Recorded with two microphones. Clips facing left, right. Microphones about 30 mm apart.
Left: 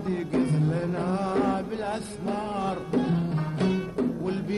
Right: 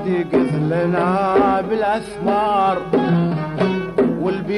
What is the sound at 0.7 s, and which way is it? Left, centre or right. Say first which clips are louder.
Music: right 11 dB; right.